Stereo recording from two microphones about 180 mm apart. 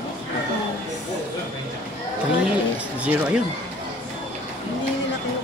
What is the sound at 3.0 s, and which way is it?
Speech, 5° right (ahead or behind).